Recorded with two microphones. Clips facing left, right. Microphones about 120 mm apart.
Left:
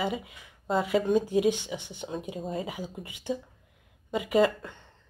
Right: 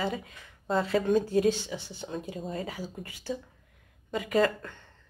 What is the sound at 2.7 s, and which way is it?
A woman's voice, 15° left (ahead or behind).